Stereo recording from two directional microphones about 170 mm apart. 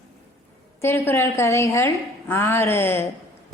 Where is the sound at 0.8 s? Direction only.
15° left (ahead or behind).